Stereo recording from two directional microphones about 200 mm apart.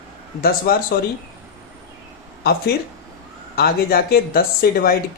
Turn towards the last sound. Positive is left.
turn(degrees=50)  # may be behind; listen again after turning